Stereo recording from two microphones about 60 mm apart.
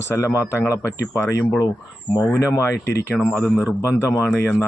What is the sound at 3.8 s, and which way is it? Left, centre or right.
Speech, left.